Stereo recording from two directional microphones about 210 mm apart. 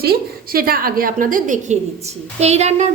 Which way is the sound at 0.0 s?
45° right (ahead or behind).